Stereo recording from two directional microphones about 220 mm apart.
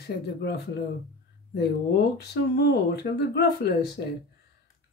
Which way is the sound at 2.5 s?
50° left (ahead or behind).